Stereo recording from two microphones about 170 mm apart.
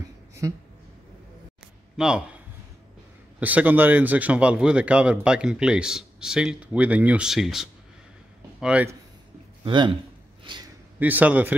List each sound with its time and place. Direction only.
0.4 s a man's voice: 20° right (ahead or behind)
2.0 s a man's voice: 5° right (ahead or behind)
3.3 s a man's voice: 10° right (ahead or behind)
9.7 s a man's voice: 30° right (ahead or behind)
10.4 s gasp: 25° right (ahead or behind)
11.0 s a man's voice: 10° right (ahead or behind)